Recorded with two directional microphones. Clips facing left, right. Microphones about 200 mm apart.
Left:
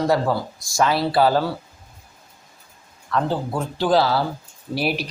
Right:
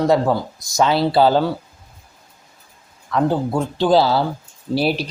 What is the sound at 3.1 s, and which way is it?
Speech, 15° right (ahead or behind).